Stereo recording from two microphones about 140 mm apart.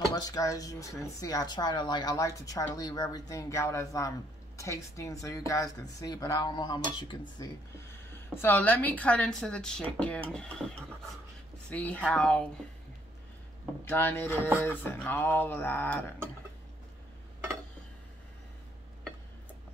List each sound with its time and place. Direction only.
0.1 s speech: 25° left (ahead or behind)
7.9 s speech: 15° left (ahead or behind)
13.8 s speech: 15° left (ahead or behind)